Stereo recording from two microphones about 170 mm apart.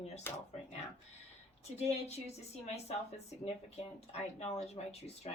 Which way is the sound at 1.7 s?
40° left (ahead or behind).